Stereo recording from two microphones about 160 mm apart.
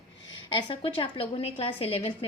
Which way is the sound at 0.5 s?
30° left (ahead or behind).